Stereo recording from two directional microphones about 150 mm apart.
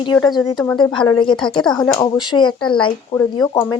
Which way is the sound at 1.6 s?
5° left (ahead or behind).